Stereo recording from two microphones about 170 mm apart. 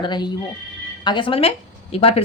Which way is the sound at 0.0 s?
25° left (ahead or behind).